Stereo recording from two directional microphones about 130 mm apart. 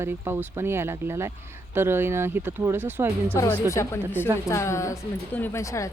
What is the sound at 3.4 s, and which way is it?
A woman's voice, 15° left (ahead or behind).